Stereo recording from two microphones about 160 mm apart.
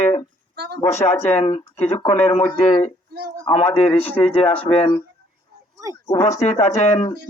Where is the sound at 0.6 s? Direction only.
90° right.